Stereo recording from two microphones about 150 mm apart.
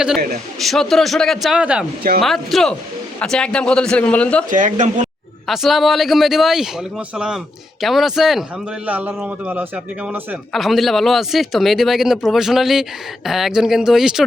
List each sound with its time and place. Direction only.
0.6 s a man's voice: centre (ahead or behind)
4.4 s speech: 55° right (ahead or behind)
5.5 s a man's voice: centre (ahead or behind)